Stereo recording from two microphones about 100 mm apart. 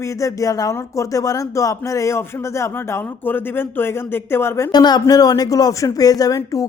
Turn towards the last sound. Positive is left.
turn(degrees=35)  # may be behind; listen again after turning